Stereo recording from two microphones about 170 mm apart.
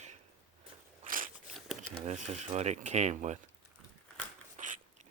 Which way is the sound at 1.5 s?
Centre (ahead or behind).